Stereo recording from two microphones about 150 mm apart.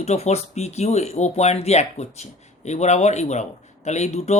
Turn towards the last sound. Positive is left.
turn(degrees=45)  # may be behind; listen again after turning